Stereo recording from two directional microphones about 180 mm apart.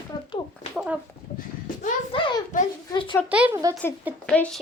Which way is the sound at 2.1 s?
30° left (ahead or behind).